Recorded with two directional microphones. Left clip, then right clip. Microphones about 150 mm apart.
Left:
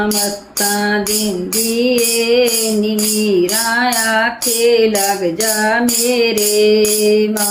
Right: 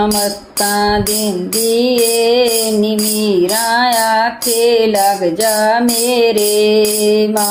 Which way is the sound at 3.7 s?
25° right (ahead or behind).